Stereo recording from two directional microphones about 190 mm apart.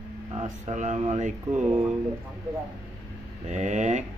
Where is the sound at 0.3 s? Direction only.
35° right (ahead or behind).